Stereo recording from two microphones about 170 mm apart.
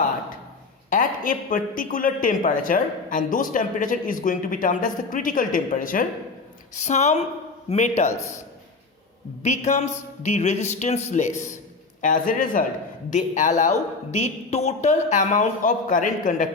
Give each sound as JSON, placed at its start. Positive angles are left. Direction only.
{"t": 0.9, "sound": "a man's voice", "side_deg": 50}
{"t": 9.4, "sound": "a man's voice", "side_deg": 45}